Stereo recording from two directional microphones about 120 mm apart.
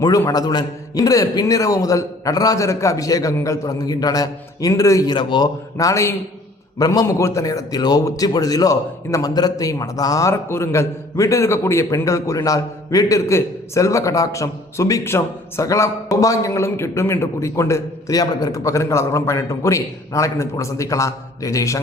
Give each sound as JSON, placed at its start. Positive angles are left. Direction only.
{"t": 0.0, "sound": "a man's voice", "side_deg": 30}
{"t": 5.1, "sound": "a man's voice", "side_deg": 40}
{"t": 5.7, "sound": "a man's voice", "side_deg": 25}